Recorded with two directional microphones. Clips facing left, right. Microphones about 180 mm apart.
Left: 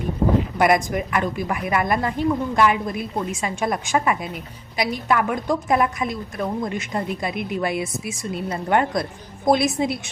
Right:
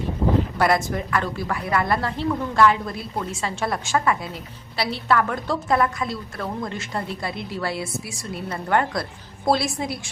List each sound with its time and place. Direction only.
0.6 s a woman's voice: 15° left (ahead or behind)